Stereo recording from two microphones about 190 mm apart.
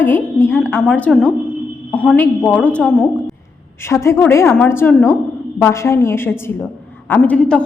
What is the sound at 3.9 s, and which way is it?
A woman's voice, 15° left (ahead or behind).